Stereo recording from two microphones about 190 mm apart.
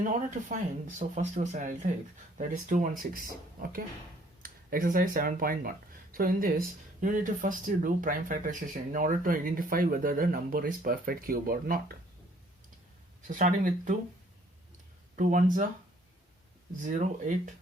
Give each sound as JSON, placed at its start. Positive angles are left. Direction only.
{"t": 0.0, "sound": "speech", "side_deg": -40}
{"t": 13.2, "sound": "speech", "side_deg": -45}
{"t": 15.1, "sound": "speech", "side_deg": -40}
{"t": 16.8, "sound": "speech", "side_deg": -45}